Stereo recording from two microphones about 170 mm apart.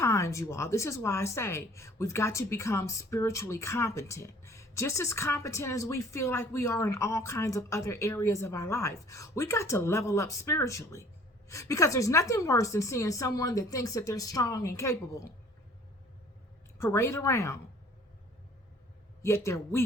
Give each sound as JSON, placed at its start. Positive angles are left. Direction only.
{"t": 0.0, "sound": "a woman's voice", "side_deg": 15}
{"t": 16.7, "sound": "speech", "side_deg": 15}
{"t": 19.2, "sound": "speech", "side_deg": 15}